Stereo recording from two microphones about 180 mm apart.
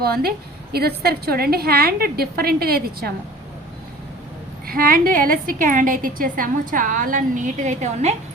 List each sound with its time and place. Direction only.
0.0 s a woman's voice: 55° right (ahead or behind)
4.6 s a woman's voice: 50° right (ahead or behind)